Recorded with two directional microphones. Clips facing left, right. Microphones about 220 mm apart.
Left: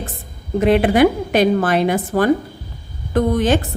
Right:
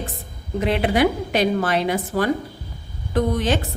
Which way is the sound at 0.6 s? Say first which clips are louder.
Left 6 dB; 50° left (ahead or behind).